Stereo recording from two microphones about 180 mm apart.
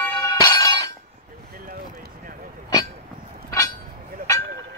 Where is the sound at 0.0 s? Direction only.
15° left (ahead or behind).